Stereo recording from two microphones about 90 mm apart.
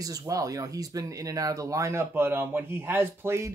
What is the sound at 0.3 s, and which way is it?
Speech, 40° right (ahead or behind).